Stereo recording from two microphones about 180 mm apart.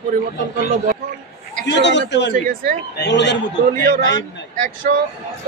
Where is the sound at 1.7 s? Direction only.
75° left (ahead or behind).